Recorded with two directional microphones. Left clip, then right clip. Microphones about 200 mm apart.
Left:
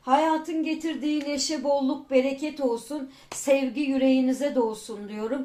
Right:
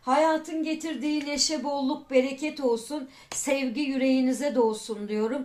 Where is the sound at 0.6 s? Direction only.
35° right (ahead or behind).